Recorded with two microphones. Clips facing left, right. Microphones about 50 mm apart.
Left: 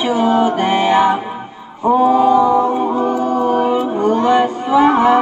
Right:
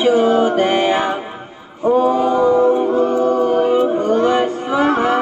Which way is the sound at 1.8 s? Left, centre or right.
Left.